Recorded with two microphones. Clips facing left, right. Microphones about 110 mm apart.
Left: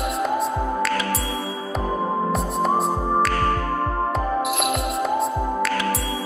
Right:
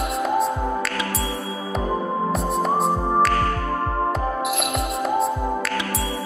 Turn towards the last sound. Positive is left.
turn(degrees=0)  # may be behind; listen again after turning